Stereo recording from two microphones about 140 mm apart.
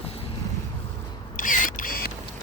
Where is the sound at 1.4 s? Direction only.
70° left (ahead or behind); by 2.1 s 90° left.